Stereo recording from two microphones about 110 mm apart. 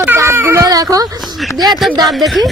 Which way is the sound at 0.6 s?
35° right (ahead or behind).